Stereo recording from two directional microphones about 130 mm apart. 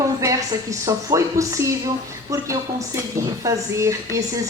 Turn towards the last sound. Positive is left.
turn(degrees=-25)  # may be behind; listen again after turning